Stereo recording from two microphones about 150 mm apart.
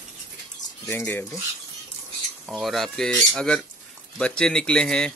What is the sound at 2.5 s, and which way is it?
Speech, centre (ahead or behind).